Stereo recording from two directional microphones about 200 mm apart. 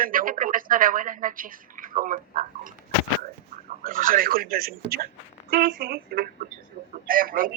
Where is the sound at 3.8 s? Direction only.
45° right (ahead or behind).